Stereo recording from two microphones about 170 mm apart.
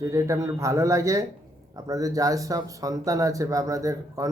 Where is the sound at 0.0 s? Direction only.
20° right (ahead or behind).